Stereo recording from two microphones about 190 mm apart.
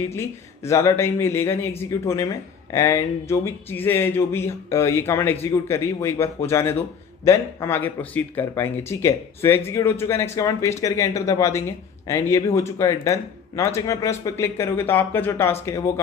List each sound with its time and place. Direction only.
0.1 s speech: 15° left (ahead or behind)